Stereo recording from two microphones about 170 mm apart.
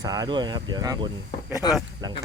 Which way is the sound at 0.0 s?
25° right (ahead or behind).